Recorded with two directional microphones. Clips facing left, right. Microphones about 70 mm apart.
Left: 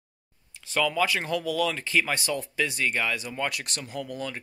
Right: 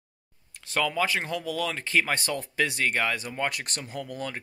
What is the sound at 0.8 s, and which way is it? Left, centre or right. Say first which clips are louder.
Speech: left 2 dB; right.